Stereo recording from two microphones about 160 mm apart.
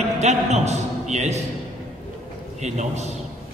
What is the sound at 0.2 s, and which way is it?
A man's voice, 45° right (ahead or behind).